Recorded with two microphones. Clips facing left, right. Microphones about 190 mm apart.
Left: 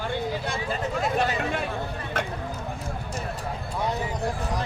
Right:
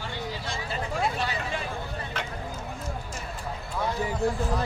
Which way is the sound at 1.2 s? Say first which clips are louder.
Left 5 dB; 55° left (ahead or behind).